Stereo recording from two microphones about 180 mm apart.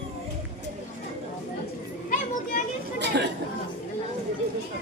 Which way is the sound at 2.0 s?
45° left (ahead or behind).